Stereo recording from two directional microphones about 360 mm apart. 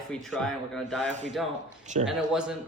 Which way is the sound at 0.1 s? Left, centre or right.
Centre.